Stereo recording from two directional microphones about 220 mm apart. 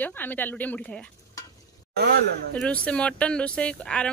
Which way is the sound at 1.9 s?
50° right (ahead or behind).